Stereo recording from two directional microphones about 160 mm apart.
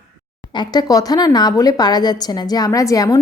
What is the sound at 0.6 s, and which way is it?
A woman's voice, 25° left (ahead or behind).